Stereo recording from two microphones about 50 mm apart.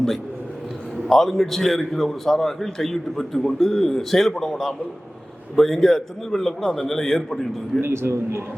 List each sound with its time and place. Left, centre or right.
1.0 s a man's voice: centre
7.8 s a man's voice: right